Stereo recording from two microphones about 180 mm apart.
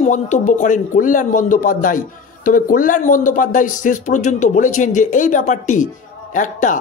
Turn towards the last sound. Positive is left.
turn(degrees=45)  # may be behind; listen again after turning